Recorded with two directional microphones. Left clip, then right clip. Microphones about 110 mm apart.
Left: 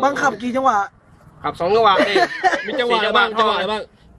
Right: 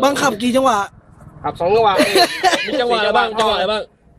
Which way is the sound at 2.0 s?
25° right (ahead or behind).